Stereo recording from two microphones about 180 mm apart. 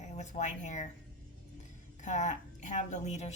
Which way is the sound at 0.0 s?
40° left (ahead or behind).